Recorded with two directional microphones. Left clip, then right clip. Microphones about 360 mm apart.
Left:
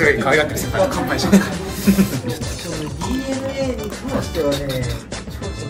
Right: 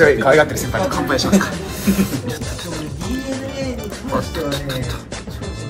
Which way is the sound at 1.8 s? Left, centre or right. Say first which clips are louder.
Left 1 dB; centre.